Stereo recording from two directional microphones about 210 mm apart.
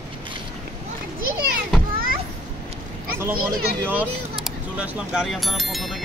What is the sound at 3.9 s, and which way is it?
Speech, 5° right (ahead or behind).